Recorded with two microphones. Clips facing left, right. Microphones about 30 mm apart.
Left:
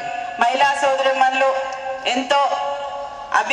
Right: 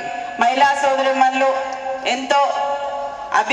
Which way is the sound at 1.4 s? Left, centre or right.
Centre.